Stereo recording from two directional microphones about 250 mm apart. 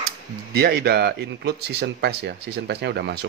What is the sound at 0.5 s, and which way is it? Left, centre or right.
Speech, right.